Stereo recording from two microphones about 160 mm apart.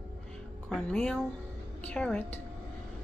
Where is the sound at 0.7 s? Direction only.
5° left (ahead or behind).